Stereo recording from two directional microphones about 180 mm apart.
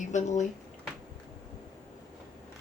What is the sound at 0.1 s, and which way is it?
Speech, 40° left (ahead or behind).